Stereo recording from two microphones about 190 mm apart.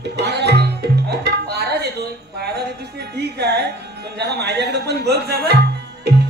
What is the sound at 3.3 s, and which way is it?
Speech, 60° right (ahead or behind).